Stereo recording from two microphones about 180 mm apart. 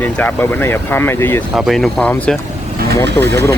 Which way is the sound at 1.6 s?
Centre (ahead or behind).